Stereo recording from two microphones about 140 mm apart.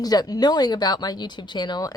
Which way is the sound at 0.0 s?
25° left (ahead or behind).